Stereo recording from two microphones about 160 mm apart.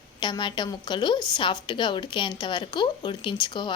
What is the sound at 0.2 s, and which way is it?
Speech, 30° left (ahead or behind).